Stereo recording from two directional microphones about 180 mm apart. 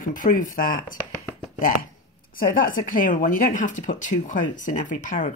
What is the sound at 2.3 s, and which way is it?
Speech, 50° left (ahead or behind).